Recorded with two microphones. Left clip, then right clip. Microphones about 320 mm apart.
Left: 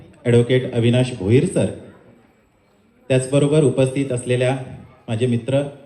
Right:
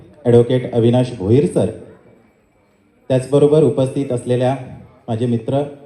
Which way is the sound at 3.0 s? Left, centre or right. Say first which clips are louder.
Right 5 dB; right.